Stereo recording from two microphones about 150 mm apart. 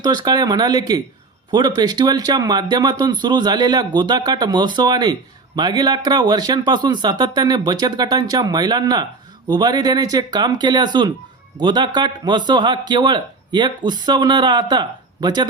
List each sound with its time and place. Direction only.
0.0 s a man's voice: 30° right (ahead or behind)